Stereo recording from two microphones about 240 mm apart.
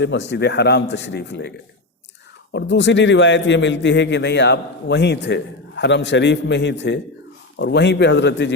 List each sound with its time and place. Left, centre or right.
0.0 s a man's voice: left